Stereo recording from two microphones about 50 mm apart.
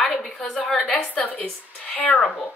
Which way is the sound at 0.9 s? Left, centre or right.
Left.